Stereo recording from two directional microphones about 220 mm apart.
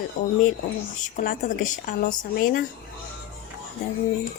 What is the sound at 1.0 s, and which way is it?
A woman's voice, 35° left (ahead or behind).